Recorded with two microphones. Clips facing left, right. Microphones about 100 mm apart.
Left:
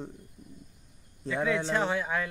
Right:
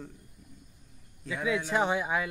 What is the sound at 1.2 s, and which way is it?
Speech, 30° left (ahead or behind).